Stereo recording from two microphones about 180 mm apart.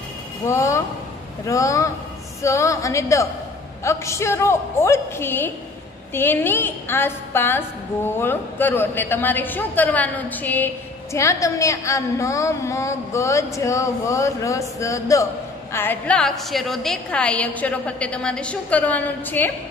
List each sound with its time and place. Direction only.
0.5 s a woman's voice: 15° left (ahead or behind)